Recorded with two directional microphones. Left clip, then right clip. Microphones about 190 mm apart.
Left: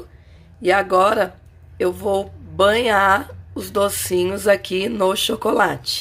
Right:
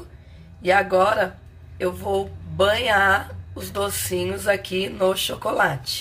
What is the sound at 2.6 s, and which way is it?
Speech, 50° left (ahead or behind).